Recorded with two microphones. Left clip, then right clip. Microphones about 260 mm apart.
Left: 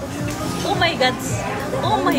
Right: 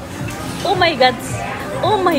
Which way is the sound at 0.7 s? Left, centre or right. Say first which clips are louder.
Right 5 dB; centre.